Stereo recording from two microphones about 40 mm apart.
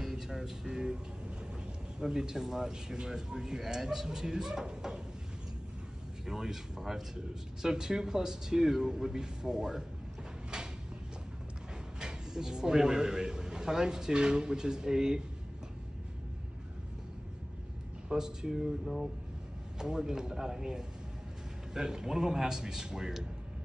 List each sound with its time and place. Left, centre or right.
0.0 s speech: centre
2.0 s speech: centre
6.2 s speech: centre
12.0 s a man's voice: centre
18.0 s speech: centre
18.6 s speech: centre
19.8 s speech: centre